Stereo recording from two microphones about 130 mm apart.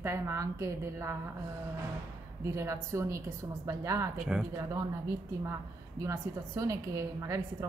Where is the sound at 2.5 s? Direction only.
20° right (ahead or behind).